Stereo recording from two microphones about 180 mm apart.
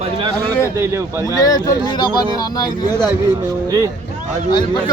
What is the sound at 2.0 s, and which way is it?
Speech, 25° left (ahead or behind).